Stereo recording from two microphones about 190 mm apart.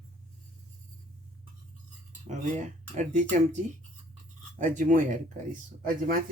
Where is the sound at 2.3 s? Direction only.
40° right (ahead or behind).